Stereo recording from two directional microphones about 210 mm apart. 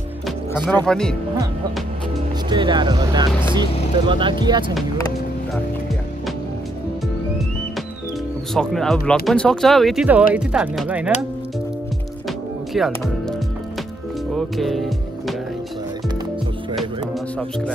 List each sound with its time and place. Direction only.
0.8 s speech: 5° left (ahead or behind)
2.5 s speech: 20° right (ahead or behind)
8.5 s speech: 5° left (ahead or behind)
12.7 s speech: centre (ahead or behind)
14.3 s music: centre (ahead or behind)